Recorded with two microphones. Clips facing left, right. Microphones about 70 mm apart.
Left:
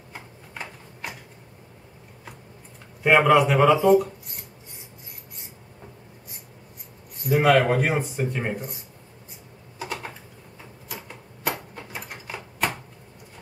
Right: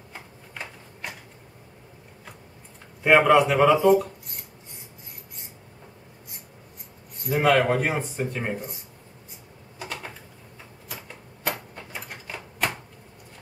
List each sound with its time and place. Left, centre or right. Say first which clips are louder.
3.0 s speech: even; centre
7.2 s speech: left 2 dB; centre
9.8 s typewriter: left 3 dB; centre
11.4 s typewriter: left 1 dB; centre